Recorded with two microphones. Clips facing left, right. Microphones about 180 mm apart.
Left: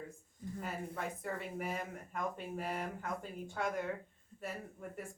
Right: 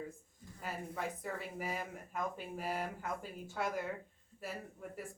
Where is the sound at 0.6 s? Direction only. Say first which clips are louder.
Right 1 dB; centre (ahead or behind).